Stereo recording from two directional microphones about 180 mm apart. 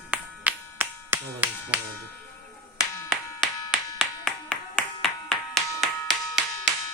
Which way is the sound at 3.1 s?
Centre (ahead or behind).